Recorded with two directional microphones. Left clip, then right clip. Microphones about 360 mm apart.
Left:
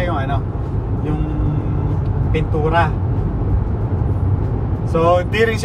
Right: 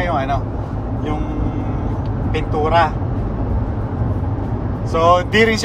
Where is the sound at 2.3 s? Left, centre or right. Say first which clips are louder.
Right 2 dB; right.